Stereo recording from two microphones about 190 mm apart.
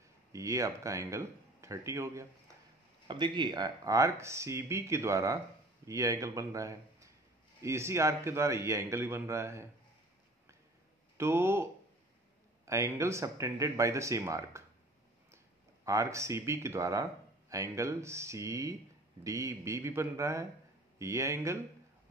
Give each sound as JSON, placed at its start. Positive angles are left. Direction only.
{"t": 0.3, "sound": "speech", "side_deg": -15}
{"t": 11.1, "sound": "speech", "side_deg": -15}